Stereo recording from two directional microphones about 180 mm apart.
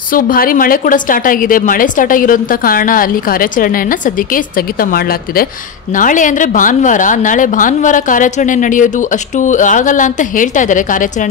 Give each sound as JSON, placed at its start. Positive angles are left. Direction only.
{"t": 0.1, "sound": "a woman's voice", "side_deg": 50}